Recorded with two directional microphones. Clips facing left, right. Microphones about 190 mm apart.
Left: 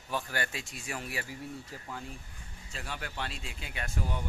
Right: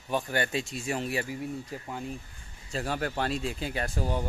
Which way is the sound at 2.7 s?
40° right (ahead or behind).